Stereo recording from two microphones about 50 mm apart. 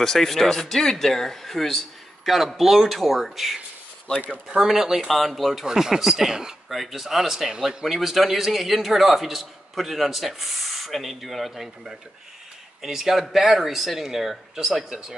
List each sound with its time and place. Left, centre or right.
0.0 s a man's voice: centre
4.6 s a man's voice: centre